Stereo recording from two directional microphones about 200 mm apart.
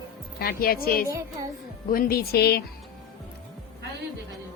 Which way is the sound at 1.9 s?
50° left (ahead or behind).